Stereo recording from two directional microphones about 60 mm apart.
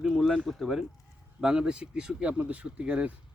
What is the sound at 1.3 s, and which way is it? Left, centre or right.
Speech, centre.